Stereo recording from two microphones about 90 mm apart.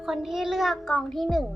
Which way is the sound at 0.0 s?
5° right (ahead or behind).